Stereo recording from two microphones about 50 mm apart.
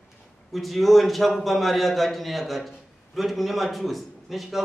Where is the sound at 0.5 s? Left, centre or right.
Centre.